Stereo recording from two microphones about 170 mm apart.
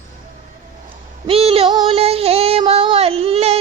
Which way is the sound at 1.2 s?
35° right (ahead or behind).